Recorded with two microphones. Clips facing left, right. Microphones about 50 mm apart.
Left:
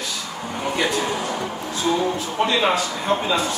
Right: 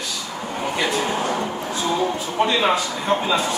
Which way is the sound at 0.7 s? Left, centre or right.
Centre.